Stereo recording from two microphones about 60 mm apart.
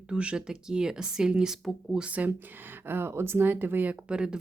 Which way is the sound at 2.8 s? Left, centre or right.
Right.